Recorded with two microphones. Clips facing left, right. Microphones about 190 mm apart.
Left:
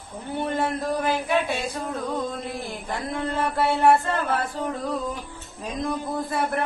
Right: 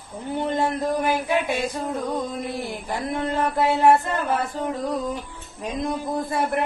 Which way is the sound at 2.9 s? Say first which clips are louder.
Right 2 dB; 20° right (ahead or behind).